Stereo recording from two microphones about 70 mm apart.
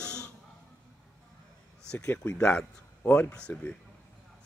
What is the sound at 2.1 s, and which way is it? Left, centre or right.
Speech, left.